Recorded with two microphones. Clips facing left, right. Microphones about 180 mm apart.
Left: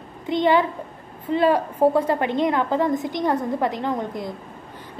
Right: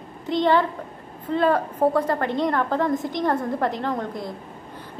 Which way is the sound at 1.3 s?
15° left (ahead or behind).